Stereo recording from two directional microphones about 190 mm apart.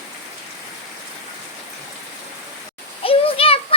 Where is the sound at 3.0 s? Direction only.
30° left (ahead or behind).